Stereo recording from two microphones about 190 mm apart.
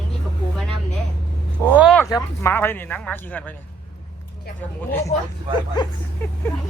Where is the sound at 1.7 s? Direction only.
5° right (ahead or behind).